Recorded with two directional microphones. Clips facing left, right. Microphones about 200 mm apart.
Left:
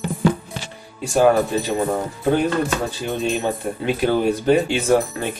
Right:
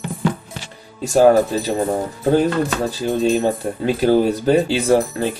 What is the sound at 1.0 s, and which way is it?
Speech, 40° right (ahead or behind).